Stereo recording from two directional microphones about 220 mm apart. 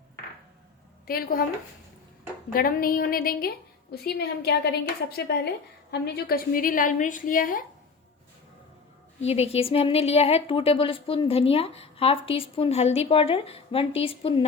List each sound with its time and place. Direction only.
1.0 s a woman's voice: 40° left (ahead or behind)
2.5 s a woman's voice: 40° left (ahead or behind)
9.2 s speech: 30° left (ahead or behind)